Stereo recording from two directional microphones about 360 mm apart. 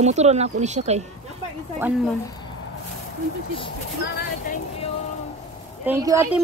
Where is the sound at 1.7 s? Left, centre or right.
Centre.